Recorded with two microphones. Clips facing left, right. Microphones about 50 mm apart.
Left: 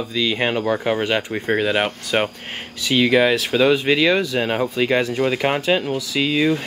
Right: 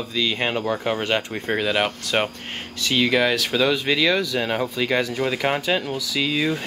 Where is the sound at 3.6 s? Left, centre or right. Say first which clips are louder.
Left 5 dB; centre.